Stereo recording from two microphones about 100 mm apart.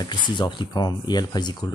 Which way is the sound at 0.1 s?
50° left (ahead or behind).